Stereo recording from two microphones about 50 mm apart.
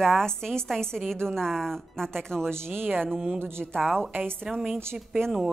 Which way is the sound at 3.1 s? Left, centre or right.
Centre.